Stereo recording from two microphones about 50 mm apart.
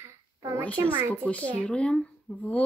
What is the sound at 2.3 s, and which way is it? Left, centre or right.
Speech, centre.